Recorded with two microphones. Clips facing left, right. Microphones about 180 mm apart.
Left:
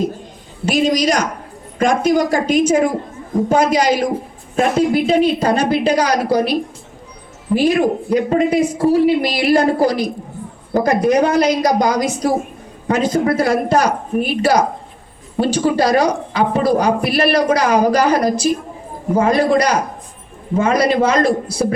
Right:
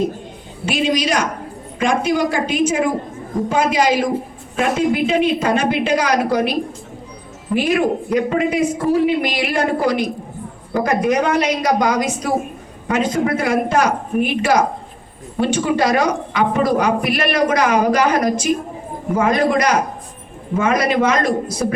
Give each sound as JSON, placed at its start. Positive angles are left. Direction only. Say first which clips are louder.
{"t": 0.6, "sound": "a woman's voice", "louder": "left 3 dB", "side_deg": 40}
{"t": 7.5, "sound": "a woman's voice", "louder": "left 2 dB", "side_deg": 35}